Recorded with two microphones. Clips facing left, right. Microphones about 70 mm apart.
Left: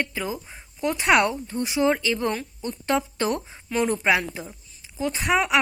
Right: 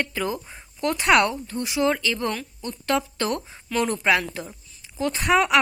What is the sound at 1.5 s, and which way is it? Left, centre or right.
A woman's voice, left.